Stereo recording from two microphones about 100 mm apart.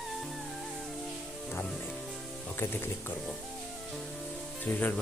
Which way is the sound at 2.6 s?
20° left (ahead or behind).